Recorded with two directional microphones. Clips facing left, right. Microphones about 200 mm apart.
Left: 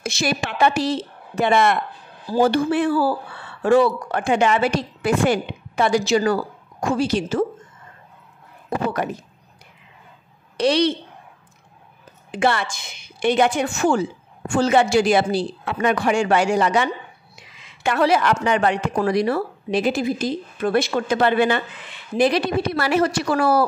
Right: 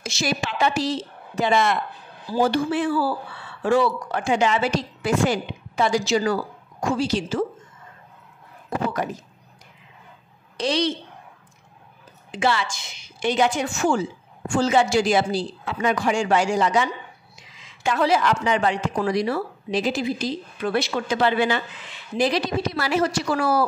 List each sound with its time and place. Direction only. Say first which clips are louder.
0.0 s speech: left 2 dB; 60° left (ahead or behind)
8.6 s speech: left 2 dB; 60° left (ahead or behind)
10.6 s speech: left 5 dB; 65° left (ahead or behind)
12.3 s speech: left 2 dB; 55° left (ahead or behind)